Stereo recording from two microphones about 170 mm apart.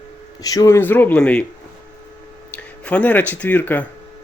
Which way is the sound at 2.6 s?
10° left (ahead or behind).